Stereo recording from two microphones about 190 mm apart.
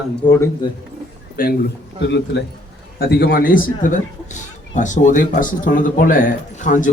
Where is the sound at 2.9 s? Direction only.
50° left (ahead or behind).